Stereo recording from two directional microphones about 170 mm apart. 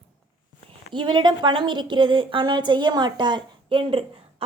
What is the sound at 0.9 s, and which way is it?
A woman's voice, 25° right (ahead or behind).